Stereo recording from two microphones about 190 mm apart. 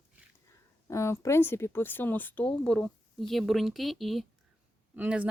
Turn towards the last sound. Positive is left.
turn(degrees=-5)  # may be behind; listen again after turning